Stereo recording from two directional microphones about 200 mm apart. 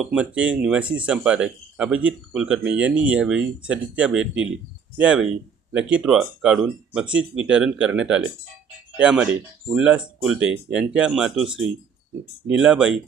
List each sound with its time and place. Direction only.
0.0 s speech: 5° right (ahead or behind)
10.4 s speech: 70° right (ahead or behind)
10.8 s speech: 5° right (ahead or behind)